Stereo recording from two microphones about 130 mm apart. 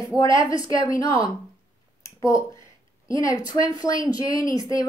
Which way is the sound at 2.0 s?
25° left (ahead or behind).